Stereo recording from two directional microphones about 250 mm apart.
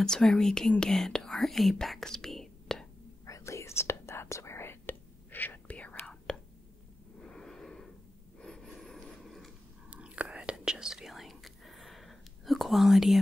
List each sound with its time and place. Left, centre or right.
0.0 s speech: centre
3.3 s whispering: centre
7.2 s wheeze: centre
8.4 s chewing: centre